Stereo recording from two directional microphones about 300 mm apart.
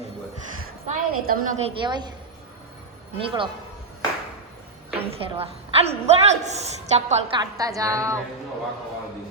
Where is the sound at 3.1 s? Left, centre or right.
Centre.